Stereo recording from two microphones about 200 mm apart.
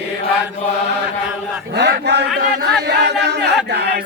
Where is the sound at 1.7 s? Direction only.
55° right (ahead or behind).